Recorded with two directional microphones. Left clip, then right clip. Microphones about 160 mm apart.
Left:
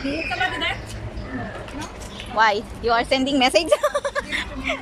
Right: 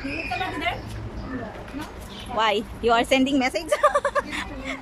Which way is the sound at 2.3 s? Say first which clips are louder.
Left 4 dB; 15° right (ahead or behind).